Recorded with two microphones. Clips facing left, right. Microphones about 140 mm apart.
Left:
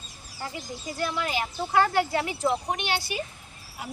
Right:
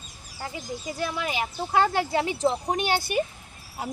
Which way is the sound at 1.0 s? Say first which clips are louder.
Left 1 dB; 15° right (ahead or behind).